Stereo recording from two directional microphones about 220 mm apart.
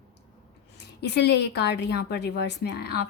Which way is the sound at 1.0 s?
50° left (ahead or behind).